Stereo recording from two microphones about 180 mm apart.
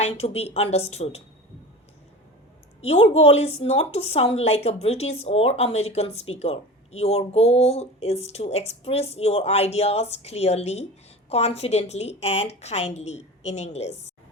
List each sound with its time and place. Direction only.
0.0 s a woman's voice: 35° left (ahead or behind)
2.8 s a woman's voice: 35° left (ahead or behind)